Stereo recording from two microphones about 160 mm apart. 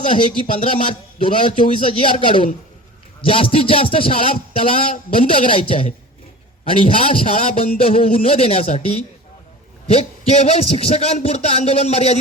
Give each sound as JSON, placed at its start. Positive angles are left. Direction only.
{"t": 0.1, "sound": "a man's voice", "side_deg": 35}
{"t": 9.8, "sound": "a man's voice", "side_deg": 40}